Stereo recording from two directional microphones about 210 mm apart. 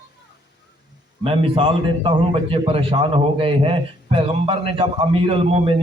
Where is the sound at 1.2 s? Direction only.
25° right (ahead or behind).